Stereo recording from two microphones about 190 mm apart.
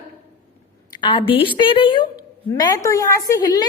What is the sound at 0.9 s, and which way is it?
A woman's voice, 25° left (ahead or behind).